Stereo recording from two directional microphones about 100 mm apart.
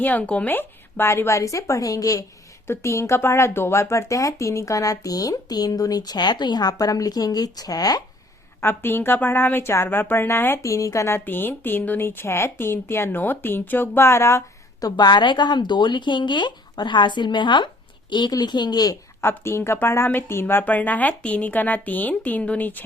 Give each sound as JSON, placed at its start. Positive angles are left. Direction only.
{"t": 0.0, "sound": "a woman's voice", "side_deg": 15}
{"t": 8.6, "sound": "a woman's voice", "side_deg": 20}
{"t": 19.2, "sound": "a woman's voice", "side_deg": 25}